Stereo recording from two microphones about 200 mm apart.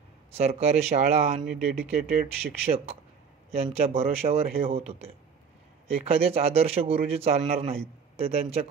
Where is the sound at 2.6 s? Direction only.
30° right (ahead or behind).